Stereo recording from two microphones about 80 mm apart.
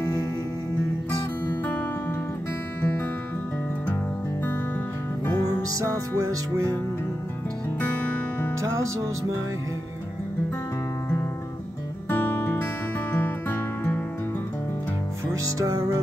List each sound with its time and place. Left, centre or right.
2.8 s music: left
5.2 s music: left
5.7 s music: right
7.8 s music: centre
8.5 s music: right
12.1 s music: left
15.6 s music: right